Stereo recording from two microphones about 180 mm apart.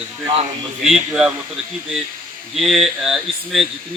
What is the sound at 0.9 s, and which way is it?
Speech, 5° right (ahead or behind).